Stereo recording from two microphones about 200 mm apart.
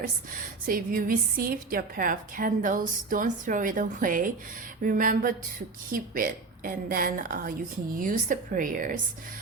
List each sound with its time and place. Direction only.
0.7 s a woman's voice: 45° right (ahead or behind)